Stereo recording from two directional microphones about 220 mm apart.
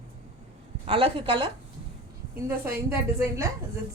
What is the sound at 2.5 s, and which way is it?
A woman's voice, 10° right (ahead or behind).